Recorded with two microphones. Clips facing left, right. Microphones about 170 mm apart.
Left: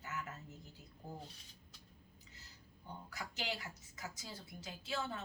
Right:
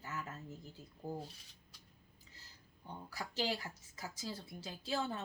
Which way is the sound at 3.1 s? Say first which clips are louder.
Right 5 dB; 30° right (ahead or behind).